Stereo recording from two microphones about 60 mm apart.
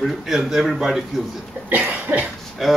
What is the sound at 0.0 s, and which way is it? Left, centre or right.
Speech, centre.